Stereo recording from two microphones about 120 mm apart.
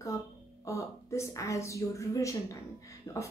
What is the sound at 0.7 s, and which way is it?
A woman's voice, 25° left (ahead or behind).